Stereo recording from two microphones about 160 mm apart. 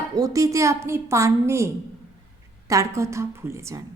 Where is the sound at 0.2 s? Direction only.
20° right (ahead or behind).